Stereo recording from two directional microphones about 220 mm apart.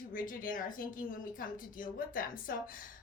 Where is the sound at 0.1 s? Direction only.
40° left (ahead or behind).